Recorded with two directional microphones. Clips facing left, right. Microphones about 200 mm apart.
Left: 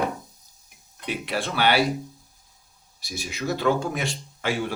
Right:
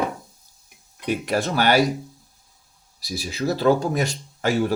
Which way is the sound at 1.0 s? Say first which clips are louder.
Right 5 dB; 45° right (ahead or behind).